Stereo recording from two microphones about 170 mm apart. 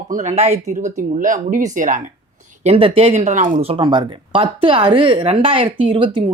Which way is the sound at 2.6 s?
35° right (ahead or behind).